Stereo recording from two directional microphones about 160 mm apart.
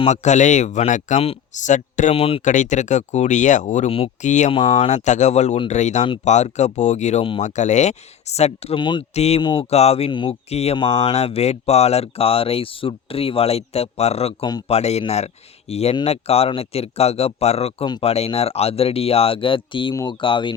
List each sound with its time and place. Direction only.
0.0 s speech: 45° left (ahead or behind)
2.1 s speech: 35° left (ahead or behind)
2.4 s speech: 50° left (ahead or behind)
4.5 s speech: 25° left (ahead or behind)
4.8 s speech: 45° left (ahead or behind)
8.8 s speech: 30° left (ahead or behind)
9.1 s speech: 40° left (ahead or behind)
9.4 s speech: 30° left (ahead or behind)